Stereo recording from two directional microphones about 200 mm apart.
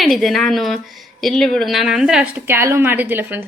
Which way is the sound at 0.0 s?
Centre (ahead or behind).